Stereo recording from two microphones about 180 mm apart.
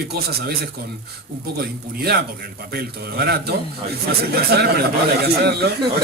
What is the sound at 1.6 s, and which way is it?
Speech, 60° right (ahead or behind).